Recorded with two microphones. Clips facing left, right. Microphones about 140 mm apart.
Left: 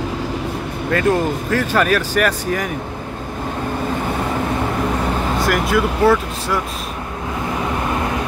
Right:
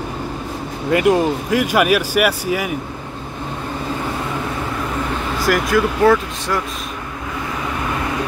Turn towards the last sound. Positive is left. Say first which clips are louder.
# right 1 dB
turn(degrees=5)  # may be behind; listen again after turning